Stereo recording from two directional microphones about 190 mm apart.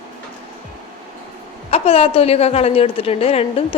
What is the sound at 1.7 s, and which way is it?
A woman's voice, 30° left (ahead or behind).